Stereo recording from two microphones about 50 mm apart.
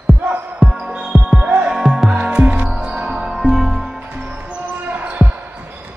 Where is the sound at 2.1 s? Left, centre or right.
Right.